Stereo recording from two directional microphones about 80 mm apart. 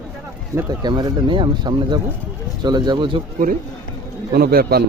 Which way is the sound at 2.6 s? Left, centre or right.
Right.